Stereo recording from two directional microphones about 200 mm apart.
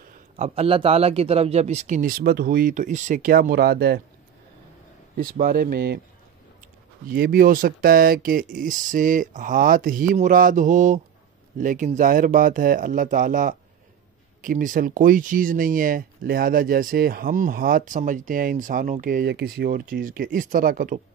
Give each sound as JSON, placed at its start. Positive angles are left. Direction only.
{"t": 0.4, "sound": "speech", "side_deg": -30}
{"t": 5.1, "sound": "speech", "side_deg": -45}
{"t": 7.1, "sound": "speech", "side_deg": -50}